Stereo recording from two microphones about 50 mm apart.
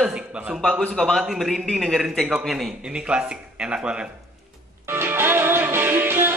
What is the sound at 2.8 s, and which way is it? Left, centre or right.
Speech, centre.